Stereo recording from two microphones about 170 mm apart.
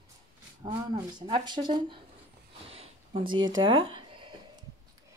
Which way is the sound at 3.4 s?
25° right (ahead or behind).